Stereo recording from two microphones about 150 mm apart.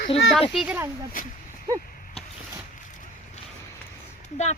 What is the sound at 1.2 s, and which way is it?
Speech, 65° left (ahead or behind).